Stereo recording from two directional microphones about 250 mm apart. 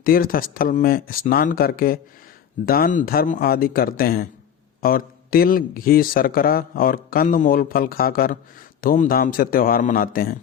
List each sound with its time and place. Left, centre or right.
0.0 s speech: left